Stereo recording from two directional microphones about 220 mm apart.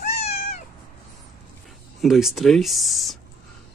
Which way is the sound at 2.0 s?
Centre (ahead or behind).